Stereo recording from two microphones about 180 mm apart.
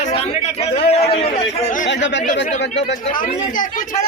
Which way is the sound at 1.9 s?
85° left.